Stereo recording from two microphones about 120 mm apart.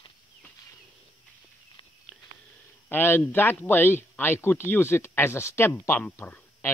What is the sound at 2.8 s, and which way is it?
Speech, 20° left (ahead or behind).